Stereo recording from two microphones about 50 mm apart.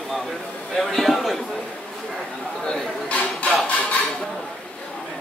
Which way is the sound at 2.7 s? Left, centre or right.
Centre.